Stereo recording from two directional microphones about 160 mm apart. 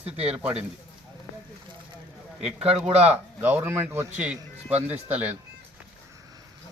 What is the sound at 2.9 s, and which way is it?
Speech, 40° right (ahead or behind).